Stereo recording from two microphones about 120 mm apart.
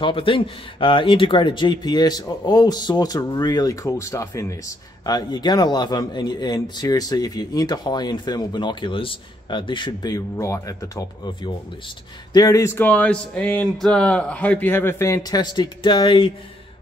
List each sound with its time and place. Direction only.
0.0 s speech: 45° left (ahead or behind); by 4.6 s 25° left (ahead or behind)
5.0 s speech: 35° left (ahead or behind)
12.3 s a sound: 30° left (ahead or behind); by 13.7 s 10° left (ahead or behind)
13.7 s speech: 5° left (ahead or behind); by 16.3 s 40° left (ahead or behind)